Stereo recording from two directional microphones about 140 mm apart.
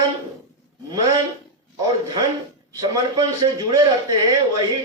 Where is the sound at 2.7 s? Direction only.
25° right (ahead or behind).